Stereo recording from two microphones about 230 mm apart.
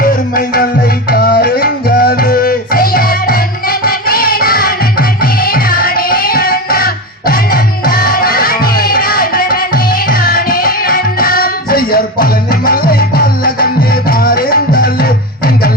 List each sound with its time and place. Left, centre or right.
0.0 s music: left